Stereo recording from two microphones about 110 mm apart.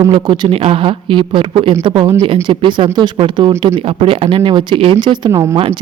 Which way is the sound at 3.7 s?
60° right (ahead or behind).